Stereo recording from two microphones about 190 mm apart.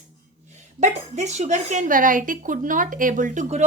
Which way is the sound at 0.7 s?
40° right (ahead or behind).